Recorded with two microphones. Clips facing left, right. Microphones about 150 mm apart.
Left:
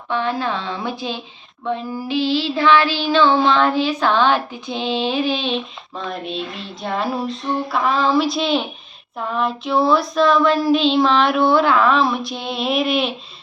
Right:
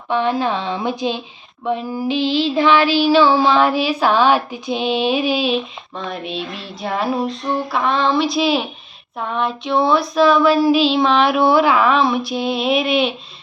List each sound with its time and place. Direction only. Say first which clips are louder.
0.1 s child singing: right 3 dB; 15° right (ahead or behind); by 13.1 s centre (ahead or behind)